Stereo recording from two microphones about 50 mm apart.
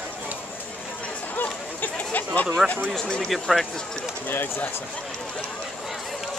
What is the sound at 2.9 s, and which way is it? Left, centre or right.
Speech, centre.